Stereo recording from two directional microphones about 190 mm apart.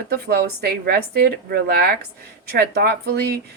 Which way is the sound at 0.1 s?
55° right (ahead or behind).